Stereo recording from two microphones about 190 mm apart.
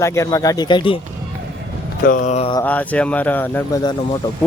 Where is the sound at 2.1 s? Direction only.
40° left (ahead or behind).